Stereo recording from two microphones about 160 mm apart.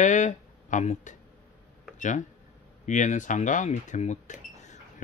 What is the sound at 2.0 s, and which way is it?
Speech, 50° left (ahead or behind).